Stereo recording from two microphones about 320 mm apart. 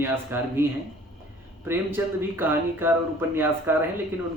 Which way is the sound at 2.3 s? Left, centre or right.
Centre.